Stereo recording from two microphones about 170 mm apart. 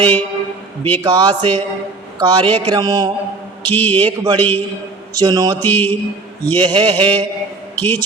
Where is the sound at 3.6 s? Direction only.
10° left (ahead or behind).